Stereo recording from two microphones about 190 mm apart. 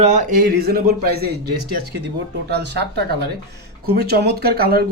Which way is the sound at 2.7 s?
60° right (ahead or behind).